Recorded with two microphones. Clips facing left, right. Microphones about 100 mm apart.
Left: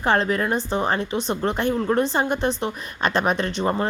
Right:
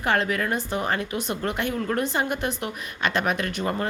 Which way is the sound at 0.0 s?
30° left (ahead or behind).